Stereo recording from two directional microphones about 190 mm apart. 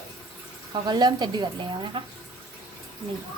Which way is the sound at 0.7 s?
20° right (ahead or behind).